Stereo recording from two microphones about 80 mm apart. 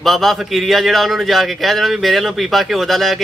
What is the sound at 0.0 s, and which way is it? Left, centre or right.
A man's voice, centre.